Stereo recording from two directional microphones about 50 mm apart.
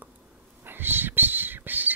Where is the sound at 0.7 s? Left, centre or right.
Right.